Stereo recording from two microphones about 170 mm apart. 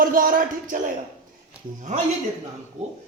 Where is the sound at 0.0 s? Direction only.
55° right (ahead or behind).